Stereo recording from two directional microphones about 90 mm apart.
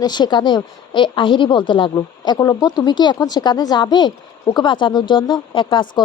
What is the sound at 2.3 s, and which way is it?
Speech, 45° left (ahead or behind).